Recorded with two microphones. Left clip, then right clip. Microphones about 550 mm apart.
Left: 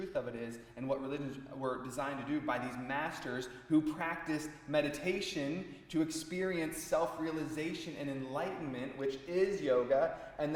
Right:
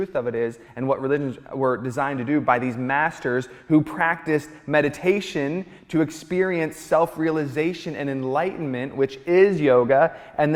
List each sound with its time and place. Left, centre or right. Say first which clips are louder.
0.1 s a man's voice: right 15 dB; right
3.7 s a man's voice: right 13 dB; right